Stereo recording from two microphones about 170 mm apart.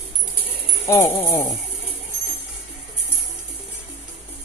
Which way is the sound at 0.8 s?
15° left (ahead or behind).